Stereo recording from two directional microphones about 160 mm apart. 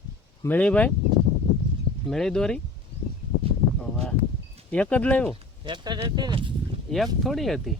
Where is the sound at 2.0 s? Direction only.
5° left (ahead or behind).